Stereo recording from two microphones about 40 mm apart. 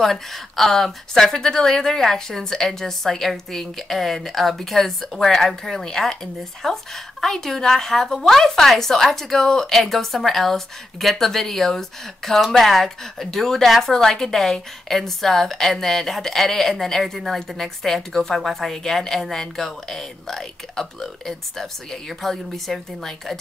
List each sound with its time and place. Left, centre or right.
0.0 s speech: centre